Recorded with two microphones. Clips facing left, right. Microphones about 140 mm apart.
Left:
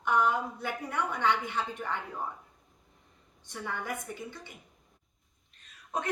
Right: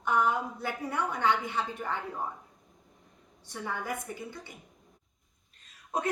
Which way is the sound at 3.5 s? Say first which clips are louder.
Right 1 dB; 10° right (ahead or behind).